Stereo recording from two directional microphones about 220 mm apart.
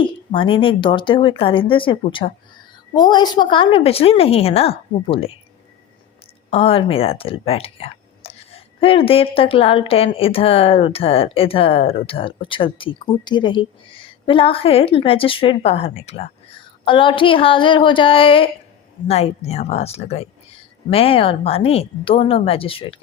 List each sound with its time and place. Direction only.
0.3 s speech: 25° left (ahead or behind)
6.5 s speech: 25° left (ahead or behind)